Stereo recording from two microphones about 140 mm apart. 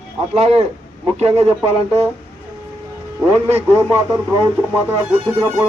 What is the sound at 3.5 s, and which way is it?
A man's voice, 20° right (ahead or behind).